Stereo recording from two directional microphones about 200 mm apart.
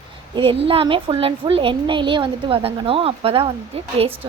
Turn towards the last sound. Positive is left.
turn(degrees=-30)  # may be behind; listen again after turning